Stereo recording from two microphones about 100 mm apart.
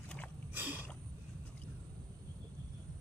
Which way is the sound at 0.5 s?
15° right (ahead or behind).